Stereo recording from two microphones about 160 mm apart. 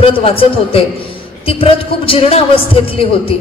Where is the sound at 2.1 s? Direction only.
35° left (ahead or behind).